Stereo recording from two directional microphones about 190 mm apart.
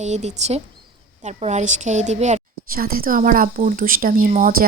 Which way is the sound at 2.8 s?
50° right (ahead or behind).